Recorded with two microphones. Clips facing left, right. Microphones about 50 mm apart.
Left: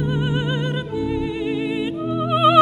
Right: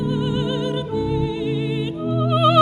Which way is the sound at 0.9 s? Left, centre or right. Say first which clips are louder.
Even; left.